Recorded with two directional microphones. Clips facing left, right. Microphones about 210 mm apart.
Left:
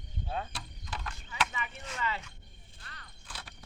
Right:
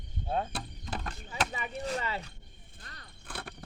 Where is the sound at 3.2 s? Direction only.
55° right (ahead or behind).